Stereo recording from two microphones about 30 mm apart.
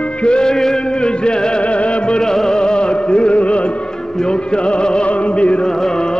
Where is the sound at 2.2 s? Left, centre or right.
Centre.